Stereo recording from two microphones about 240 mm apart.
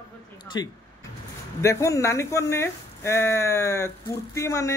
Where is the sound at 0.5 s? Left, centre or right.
Centre.